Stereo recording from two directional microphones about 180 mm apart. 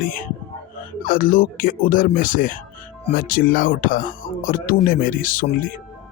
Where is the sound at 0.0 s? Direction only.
50° left (ahead or behind).